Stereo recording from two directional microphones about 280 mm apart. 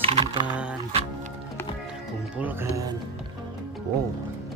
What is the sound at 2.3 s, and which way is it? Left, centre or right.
Speech, centre.